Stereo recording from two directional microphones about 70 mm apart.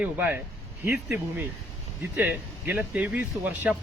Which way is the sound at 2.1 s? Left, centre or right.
Right.